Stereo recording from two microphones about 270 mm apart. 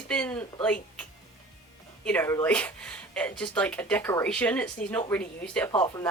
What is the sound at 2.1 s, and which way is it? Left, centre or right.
Speech, centre.